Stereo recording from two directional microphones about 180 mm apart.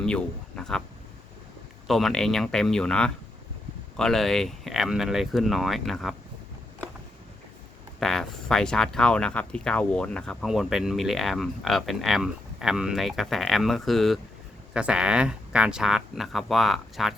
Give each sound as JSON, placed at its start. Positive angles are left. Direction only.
{"t": 0.0, "sound": "speech", "side_deg": 5}
{"t": 1.9, "sound": "speech", "side_deg": 0}
{"t": 7.9, "sound": "speech", "side_deg": 0}